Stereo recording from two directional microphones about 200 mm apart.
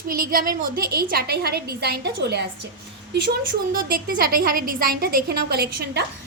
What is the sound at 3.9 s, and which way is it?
A woman's voice, 45° right (ahead or behind).